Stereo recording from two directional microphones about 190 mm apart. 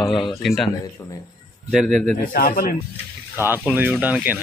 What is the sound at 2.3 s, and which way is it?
Speech, 45° left (ahead or behind).